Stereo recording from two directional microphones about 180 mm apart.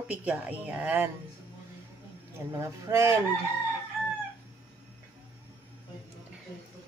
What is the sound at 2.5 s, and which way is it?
Speech, 15° right (ahead or behind).